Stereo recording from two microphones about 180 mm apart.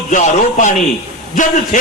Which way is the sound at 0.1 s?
45° left (ahead or behind).